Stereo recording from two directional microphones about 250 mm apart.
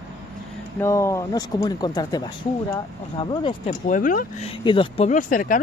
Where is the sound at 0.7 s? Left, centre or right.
Centre.